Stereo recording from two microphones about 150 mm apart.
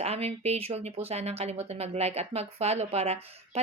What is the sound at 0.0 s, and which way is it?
Speech, 45° right (ahead or behind).